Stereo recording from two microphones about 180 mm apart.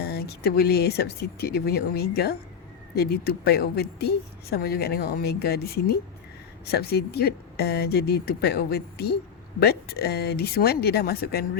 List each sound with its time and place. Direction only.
0.1 s speech: 60° left (ahead or behind)